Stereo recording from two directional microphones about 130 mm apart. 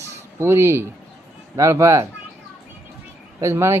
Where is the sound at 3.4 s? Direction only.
20° right (ahead or behind).